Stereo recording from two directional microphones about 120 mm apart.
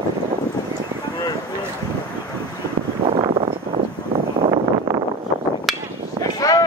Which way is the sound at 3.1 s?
55° right (ahead or behind).